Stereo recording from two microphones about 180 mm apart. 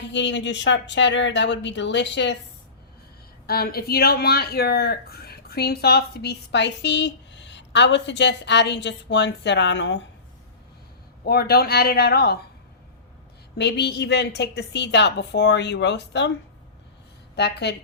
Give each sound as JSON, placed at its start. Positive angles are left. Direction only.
{"t": 0.1, "sound": "speech", "side_deg": 85}
{"t": 3.4, "sound": "speech", "side_deg": 60}
{"t": 11.3, "sound": "speech", "side_deg": 60}
{"t": 13.6, "sound": "speech", "side_deg": 70}
{"t": 17.3, "sound": "speech", "side_deg": 70}